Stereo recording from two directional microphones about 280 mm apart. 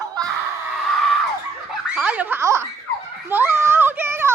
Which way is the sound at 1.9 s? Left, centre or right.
Centre.